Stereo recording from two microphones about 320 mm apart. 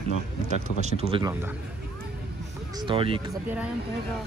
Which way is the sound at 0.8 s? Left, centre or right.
Centre.